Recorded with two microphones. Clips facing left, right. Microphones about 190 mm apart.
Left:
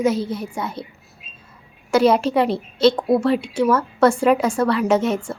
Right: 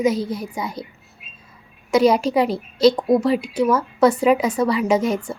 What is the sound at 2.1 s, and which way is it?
Speech, centre (ahead or behind).